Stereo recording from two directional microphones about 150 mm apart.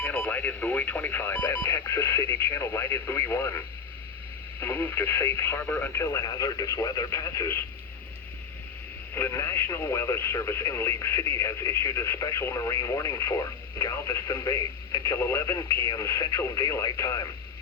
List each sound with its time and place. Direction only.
0.0 s speech: 15° left (ahead or behind)
4.6 s speech: 15° left (ahead or behind)
9.1 s speech: 20° left (ahead or behind)